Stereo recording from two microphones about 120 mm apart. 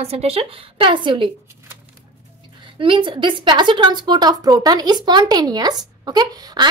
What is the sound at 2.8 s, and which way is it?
Speech, 45° right (ahead or behind).